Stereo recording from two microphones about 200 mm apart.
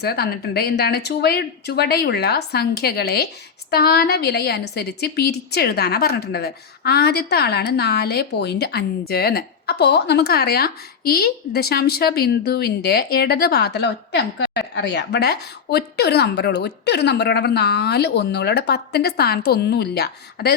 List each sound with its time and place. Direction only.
0.0 s a woman's voice: 50° left (ahead or behind)